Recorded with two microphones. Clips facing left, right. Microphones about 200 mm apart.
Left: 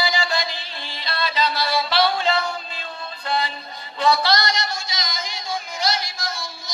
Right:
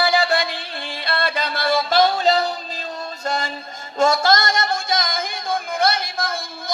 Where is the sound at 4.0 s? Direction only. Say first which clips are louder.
Right 3 dB; 45° right (ahead or behind).